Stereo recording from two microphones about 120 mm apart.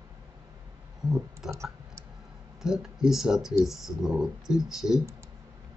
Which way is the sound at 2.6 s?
5° right (ahead or behind).